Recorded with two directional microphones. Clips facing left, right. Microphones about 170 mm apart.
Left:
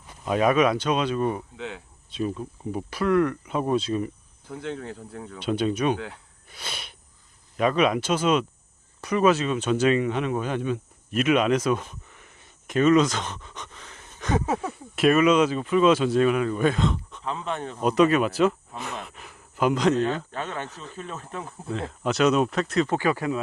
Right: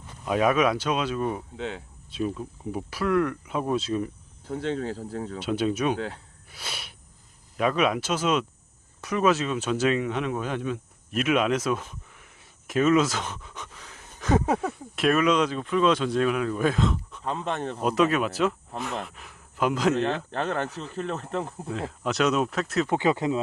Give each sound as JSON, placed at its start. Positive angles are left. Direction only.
{"t": 0.3, "sound": "speech", "side_deg": 0}
{"t": 4.6, "sound": "speech", "side_deg": -80}
{"t": 5.4, "sound": "speech", "side_deg": -5}
{"t": 6.5, "sound": "a sound", "side_deg": -5}
{"t": 7.5, "sound": "speech", "side_deg": 0}
{"t": 17.5, "sound": "speech", "side_deg": -40}
{"t": 17.8, "sound": "speech", "side_deg": 0}
{"t": 21.7, "sound": "speech", "side_deg": 0}
{"t": 22.9, "sound": "speech", "side_deg": -20}